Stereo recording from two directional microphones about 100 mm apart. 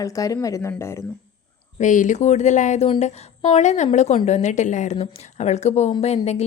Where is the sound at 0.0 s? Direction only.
35° left (ahead or behind).